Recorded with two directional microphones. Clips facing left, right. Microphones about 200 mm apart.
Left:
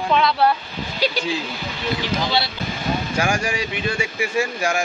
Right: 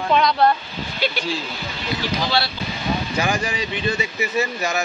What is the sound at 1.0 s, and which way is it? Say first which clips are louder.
Speech: left 2 dB; 35° left (ahead or behind).